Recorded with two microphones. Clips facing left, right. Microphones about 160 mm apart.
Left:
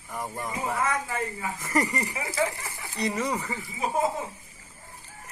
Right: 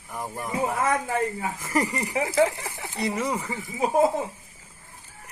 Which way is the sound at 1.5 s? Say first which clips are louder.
Left 1 dB; 10° right (ahead or behind).